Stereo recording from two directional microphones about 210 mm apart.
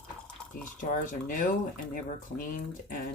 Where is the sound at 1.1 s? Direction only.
40° left (ahead or behind).